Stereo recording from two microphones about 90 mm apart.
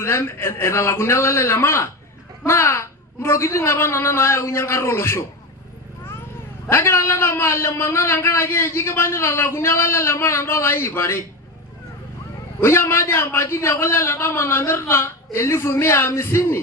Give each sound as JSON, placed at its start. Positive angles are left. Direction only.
{"t": 0.0, "sound": "a man's voice", "side_deg": 30}
{"t": 6.7, "sound": "a man's voice", "side_deg": 25}
{"t": 12.5, "sound": "a man's voice", "side_deg": 25}